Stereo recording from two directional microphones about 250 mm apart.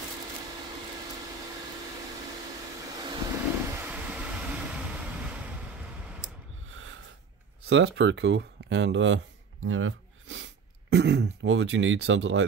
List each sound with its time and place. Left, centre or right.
3.0 s vehicle: centre
6.7 s snort: right
7.7 s speech: right